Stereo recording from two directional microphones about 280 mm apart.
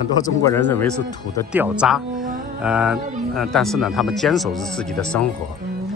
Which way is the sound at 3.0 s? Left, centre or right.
Right.